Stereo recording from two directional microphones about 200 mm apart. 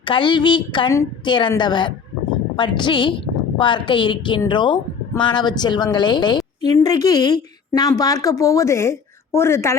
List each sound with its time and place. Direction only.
0.0 s a woman's voice: 25° left (ahead or behind)